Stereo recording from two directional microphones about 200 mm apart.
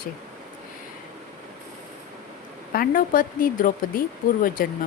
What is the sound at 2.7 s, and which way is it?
Speech, 45° left (ahead or behind).